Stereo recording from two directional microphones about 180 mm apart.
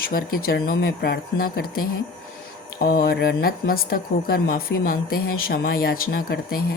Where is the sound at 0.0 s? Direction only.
55° left (ahead or behind).